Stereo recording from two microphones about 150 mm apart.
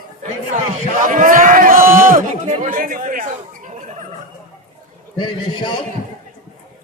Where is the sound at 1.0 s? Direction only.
65° right (ahead or behind).